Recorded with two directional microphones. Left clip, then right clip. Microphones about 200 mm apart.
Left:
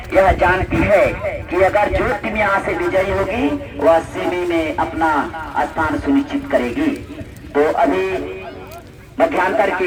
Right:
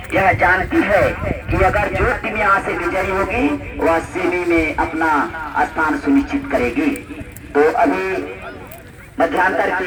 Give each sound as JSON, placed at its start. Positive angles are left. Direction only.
{"t": 0.1, "sound": "a man's voice", "side_deg": 45}